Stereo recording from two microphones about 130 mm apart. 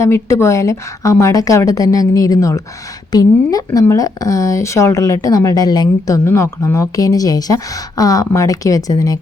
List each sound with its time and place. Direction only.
0.0 s a woman's voice: 20° left (ahead or behind)